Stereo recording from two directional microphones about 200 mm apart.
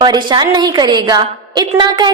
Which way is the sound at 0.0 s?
20° right (ahead or behind).